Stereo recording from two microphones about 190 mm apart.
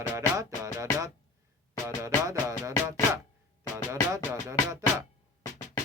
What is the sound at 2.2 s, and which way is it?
Speech, 15° right (ahead or behind).